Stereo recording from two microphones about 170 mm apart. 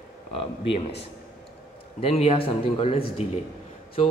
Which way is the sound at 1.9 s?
35° left (ahead or behind).